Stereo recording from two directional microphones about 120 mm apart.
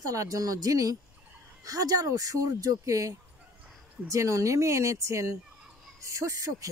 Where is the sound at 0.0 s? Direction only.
30° right (ahead or behind).